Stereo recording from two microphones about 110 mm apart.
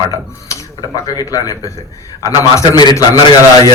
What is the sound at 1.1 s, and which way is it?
A man's voice, 35° left (ahead or behind).